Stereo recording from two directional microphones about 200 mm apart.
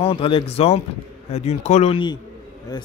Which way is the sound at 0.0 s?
25° left (ahead or behind).